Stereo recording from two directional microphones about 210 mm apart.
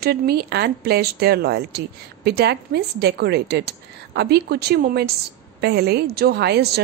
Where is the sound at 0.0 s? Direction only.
50° right (ahead or behind).